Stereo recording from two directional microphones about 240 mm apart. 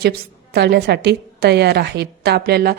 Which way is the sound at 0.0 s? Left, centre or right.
Right.